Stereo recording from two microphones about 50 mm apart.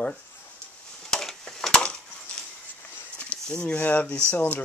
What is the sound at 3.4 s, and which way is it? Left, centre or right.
Speech, centre.